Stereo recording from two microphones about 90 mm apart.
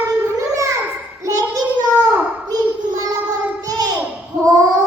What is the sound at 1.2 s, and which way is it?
Child singing, 40° right (ahead or behind).